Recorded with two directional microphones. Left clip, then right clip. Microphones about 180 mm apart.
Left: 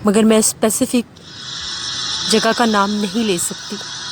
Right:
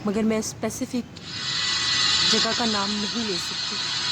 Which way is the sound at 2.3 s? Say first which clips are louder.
Left 8 dB; 50° left (ahead or behind).